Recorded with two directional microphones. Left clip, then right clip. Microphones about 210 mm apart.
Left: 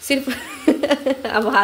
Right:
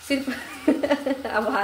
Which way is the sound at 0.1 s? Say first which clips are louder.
Left 5 dB; 50° left (ahead or behind).